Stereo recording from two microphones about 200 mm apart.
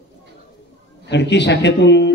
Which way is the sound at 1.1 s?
60° left (ahead or behind).